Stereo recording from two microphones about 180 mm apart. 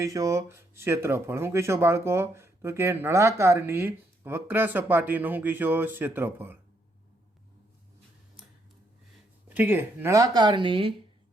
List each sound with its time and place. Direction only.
0.0 s speech: 20° right (ahead or behind)
9.5 s speech: 10° right (ahead or behind); by 10.9 s 30° right (ahead or behind)